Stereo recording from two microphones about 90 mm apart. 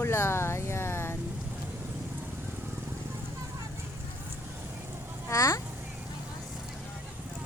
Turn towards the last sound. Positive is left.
turn(degrees=40)  # may be behind; listen again after turning